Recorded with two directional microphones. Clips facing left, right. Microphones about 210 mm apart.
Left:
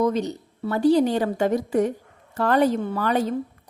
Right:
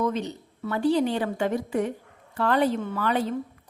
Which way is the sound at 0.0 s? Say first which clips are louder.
Left 5 dB; 40° left (ahead or behind).